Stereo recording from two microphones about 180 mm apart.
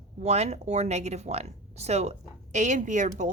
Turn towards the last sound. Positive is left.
turn(degrees=-40)  # may be behind; listen again after turning